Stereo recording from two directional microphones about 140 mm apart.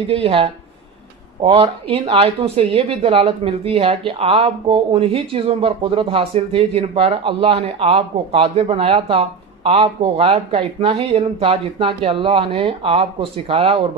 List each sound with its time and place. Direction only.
0.1 s a woman's voice: 40° right (ahead or behind)